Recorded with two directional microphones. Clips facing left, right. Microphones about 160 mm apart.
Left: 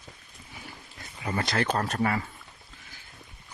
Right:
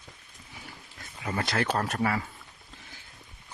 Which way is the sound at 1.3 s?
5° right (ahead or behind).